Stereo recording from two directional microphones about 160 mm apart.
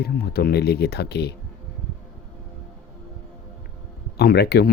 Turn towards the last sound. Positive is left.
turn(degrees=90)